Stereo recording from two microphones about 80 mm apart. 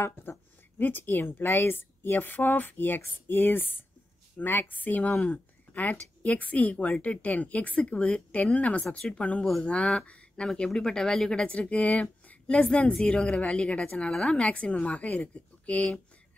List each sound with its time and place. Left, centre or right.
0.0 s a woman's voice: left